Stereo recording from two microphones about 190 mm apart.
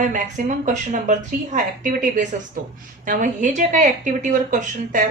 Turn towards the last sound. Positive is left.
turn(degrees=-40)  # may be behind; listen again after turning